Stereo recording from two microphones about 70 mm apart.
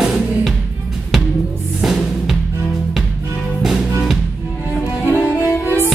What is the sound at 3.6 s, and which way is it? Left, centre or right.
Music, centre.